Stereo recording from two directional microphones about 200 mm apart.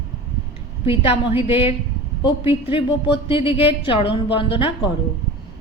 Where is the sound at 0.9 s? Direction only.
25° left (ahead or behind).